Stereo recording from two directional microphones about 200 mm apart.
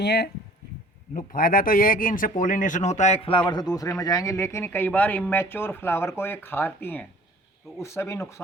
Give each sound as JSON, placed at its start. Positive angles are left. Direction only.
{"t": 0.0, "sound": "a man's voice", "side_deg": 55}
{"t": 7.8, "sound": "a man's voice", "side_deg": 15}